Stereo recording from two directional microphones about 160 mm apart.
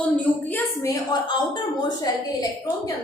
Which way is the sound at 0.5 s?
20° left (ahead or behind).